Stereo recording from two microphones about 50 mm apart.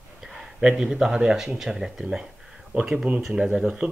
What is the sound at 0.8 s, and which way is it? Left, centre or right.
Speech, centre.